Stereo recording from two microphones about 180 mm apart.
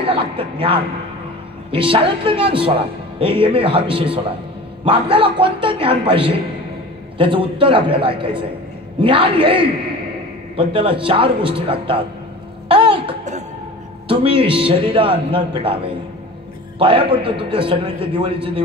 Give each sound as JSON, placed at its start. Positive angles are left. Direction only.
{"t": 0.0, "sound": "speech", "side_deg": -30}
{"t": 12.6, "sound": "a sound", "side_deg": -30}
{"t": 14.0, "sound": "a man's voice", "side_deg": -30}